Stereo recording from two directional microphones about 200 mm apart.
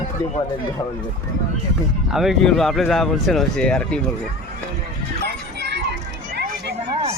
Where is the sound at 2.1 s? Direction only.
Centre (ahead or behind).